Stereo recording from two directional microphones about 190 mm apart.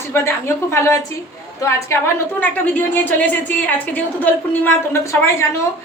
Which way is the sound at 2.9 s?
10° left (ahead or behind).